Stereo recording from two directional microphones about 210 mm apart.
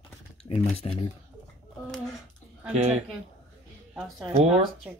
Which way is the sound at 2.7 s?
30° right (ahead or behind).